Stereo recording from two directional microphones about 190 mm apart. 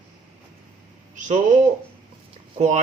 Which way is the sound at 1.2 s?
40° right (ahead or behind).